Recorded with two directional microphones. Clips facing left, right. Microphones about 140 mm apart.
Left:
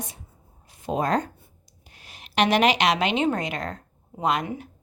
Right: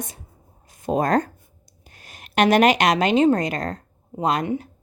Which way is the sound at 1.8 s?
45° right (ahead or behind).